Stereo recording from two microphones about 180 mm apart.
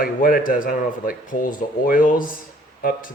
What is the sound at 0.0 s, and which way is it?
Speech, 50° left (ahead or behind).